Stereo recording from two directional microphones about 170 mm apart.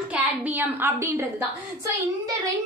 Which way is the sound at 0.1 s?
10° right (ahead or behind).